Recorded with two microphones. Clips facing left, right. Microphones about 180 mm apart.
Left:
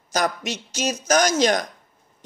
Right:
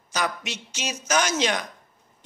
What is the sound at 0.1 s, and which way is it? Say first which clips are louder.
A man's voice: left 5 dB; 40° left (ahead or behind).